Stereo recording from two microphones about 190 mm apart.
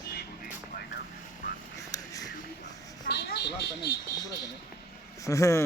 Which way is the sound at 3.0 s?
60° left (ahead or behind).